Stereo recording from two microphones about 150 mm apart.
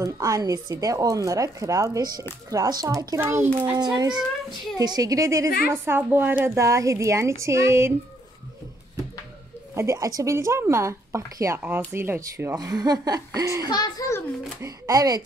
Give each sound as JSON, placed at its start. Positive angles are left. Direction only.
{"t": 0.0, "sound": "speech", "side_deg": -25}
{"t": 3.7, "sound": "a woman's voice", "side_deg": -25}
{"t": 9.8, "sound": "speech", "side_deg": -20}
{"t": 13.7, "sound": "a child's voice", "side_deg": 25}
{"t": 14.6, "sound": "speech", "side_deg": -25}